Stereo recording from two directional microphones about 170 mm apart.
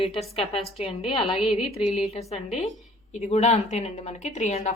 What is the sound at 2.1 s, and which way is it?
A woman's voice, 35° left (ahead or behind).